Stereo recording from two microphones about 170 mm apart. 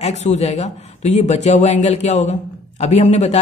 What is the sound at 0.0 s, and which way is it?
A man's voice, 40° left (ahead or behind).